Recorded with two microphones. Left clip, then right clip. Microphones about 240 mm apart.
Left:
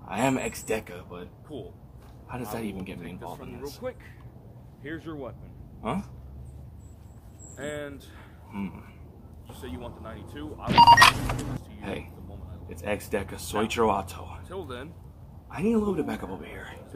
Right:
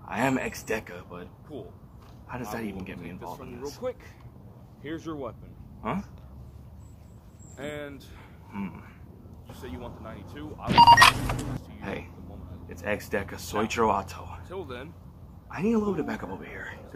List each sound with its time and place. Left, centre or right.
0.0 s speech: centre
3.2 s speech: centre
3.8 s speech: right
7.5 s speech: centre
8.5 s speech: centre